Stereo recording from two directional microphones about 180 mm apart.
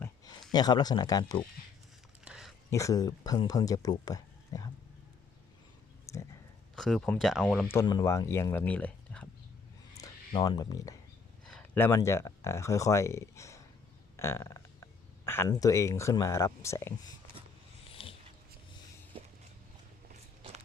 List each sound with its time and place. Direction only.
0.5 s speech: 20° left (ahead or behind)
2.2 s a sound: 5° right (ahead or behind)
2.6 s speech: 15° left (ahead or behind)
6.1 s a sound: 15° left (ahead or behind)
6.7 s speech: centre (ahead or behind)
7.8 s speech: 20° left (ahead or behind)
10.0 s speech: 25° left (ahead or behind)
11.4 s speech: 5° left (ahead or behind)
18.0 s dog: 30° left (ahead or behind)
19.1 s a sound: 30° right (ahead or behind)